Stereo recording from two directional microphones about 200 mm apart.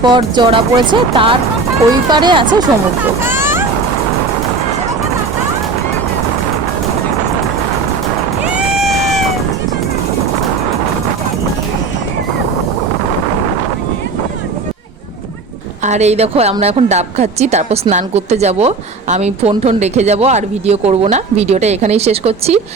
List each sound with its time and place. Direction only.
0.0 s speech: 20° right (ahead or behind)
3.2 s vehicle: 10° right (ahead or behind)
8.5 s a sound: centre (ahead or behind)
15.8 s a woman's voice: 35° right (ahead or behind)